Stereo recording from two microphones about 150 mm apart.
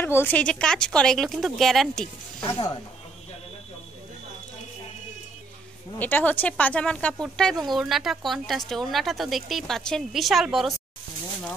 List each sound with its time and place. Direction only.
0.0 s speech: 15° left (ahead or behind)
2.4 s speech: 25° left (ahead or behind)
5.9 s speech: 10° left (ahead or behind)